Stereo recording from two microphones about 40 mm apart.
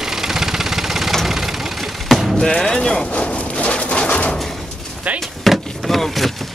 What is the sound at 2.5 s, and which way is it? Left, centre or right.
Vehicle, centre.